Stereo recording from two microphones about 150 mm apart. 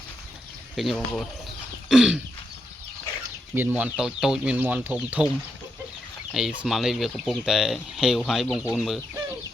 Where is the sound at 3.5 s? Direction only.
15° right (ahead or behind); by 8.9 s centre (ahead or behind).